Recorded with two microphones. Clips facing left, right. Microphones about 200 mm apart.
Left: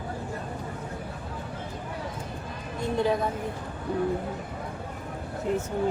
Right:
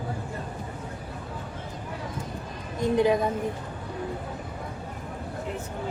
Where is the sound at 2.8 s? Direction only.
15° right (ahead or behind).